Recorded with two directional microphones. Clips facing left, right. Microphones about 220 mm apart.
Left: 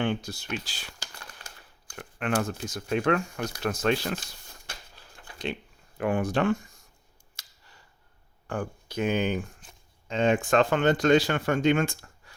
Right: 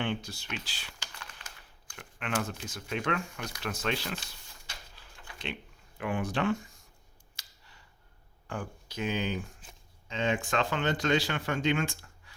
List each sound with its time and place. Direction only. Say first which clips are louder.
0.0 s speech: left 5 dB; 45° left (ahead or behind)
6.0 s speech: left 6 dB; 45° left (ahead or behind)
8.4 s speech: left 6 dB; 50° left (ahead or behind)